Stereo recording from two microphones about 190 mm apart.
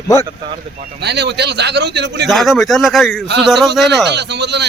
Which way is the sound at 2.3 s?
Centre (ahead or behind).